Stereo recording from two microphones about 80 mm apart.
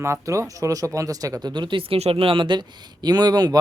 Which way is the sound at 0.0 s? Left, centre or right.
Right.